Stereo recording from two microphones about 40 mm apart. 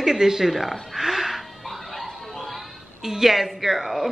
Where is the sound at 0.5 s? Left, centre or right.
Centre.